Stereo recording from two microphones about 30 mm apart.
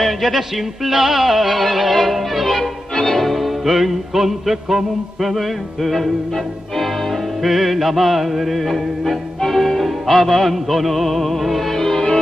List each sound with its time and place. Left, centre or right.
0.0 s a man's voice: centre
0.4 s music: centre
5.3 s music: centre
11.8 s music: centre